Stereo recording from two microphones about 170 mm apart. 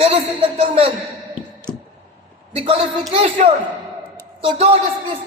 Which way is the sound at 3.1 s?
35° right (ahead or behind).